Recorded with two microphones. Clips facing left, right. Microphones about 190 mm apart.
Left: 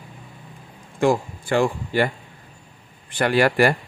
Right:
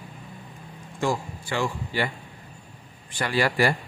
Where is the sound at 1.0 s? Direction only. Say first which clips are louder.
Left 7 dB; 55° left (ahead or behind).